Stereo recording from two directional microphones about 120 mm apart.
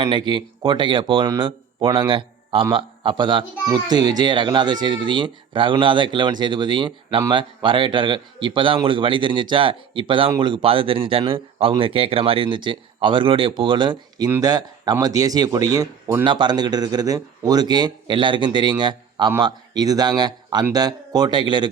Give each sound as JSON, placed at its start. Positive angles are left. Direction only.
{"t": 0.1, "sound": "a man's voice", "side_deg": -40}